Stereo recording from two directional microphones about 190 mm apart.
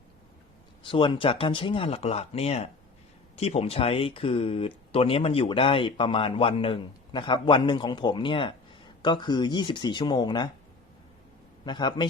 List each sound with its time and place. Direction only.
0.8 s speech: 25° left (ahead or behind)
11.6 s speech: 25° left (ahead or behind)